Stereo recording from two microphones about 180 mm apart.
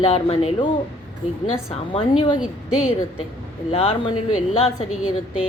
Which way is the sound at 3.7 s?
30° left (ahead or behind).